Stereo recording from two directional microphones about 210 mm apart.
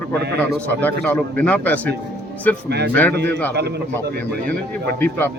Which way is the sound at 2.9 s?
10° left (ahead or behind).